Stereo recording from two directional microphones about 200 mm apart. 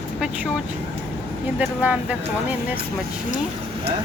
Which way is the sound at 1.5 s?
5° right (ahead or behind).